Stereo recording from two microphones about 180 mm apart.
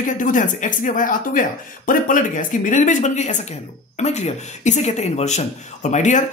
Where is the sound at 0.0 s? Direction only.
45° left (ahead or behind).